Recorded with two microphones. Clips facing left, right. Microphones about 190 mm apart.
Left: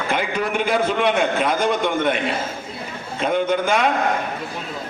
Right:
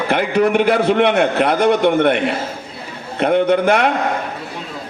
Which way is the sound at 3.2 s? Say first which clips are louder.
Right 6 dB; 65° right (ahead or behind).